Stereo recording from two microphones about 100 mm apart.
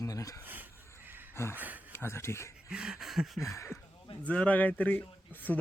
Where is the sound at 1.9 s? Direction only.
25° left (ahead or behind).